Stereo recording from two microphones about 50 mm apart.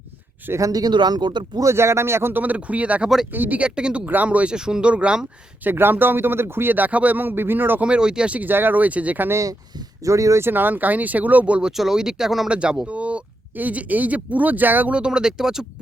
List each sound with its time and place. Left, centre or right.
0.5 s speech: right
1.6 s speech: right
2.3 s speech: right
3.6 s speech: right
4.0 s speech: right
4.5 s speech: centre
5.6 s speech: right
7.8 s speech: centre
8.4 s speech: right
10.0 s speech: right
10.4 s speech: right
11.7 s speech: centre
12.5 s speech: centre; by 14.9 s right
14.9 s speech: centre